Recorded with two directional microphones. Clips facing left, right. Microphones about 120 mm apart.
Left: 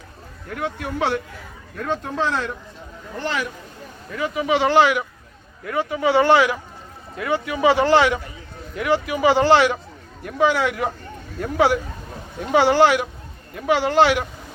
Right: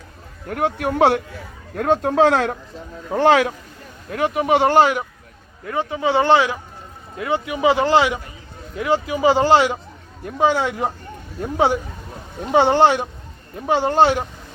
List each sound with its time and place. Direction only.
0.4 s speech: 50° right (ahead or behind); by 2.6 s 70° right (ahead or behind)
3.1 s speech: 90° right
4.1 s speech: 55° right (ahead or behind)
5.6 s speech: 30° right (ahead or behind)